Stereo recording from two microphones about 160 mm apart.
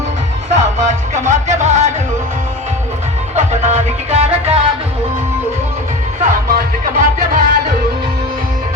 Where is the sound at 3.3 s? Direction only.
45° right (ahead or behind).